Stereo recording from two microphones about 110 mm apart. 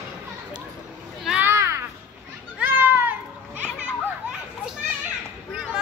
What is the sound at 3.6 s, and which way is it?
Children playing, 10° right (ahead or behind).